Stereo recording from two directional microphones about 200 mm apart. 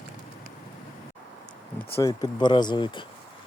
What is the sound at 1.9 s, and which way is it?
Speech, 15° left (ahead or behind).